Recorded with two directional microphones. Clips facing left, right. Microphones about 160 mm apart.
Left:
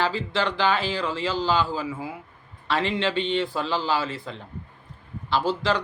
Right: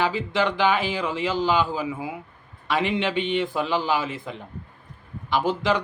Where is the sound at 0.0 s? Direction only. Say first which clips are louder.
Right 2 dB; 15° right (ahead or behind).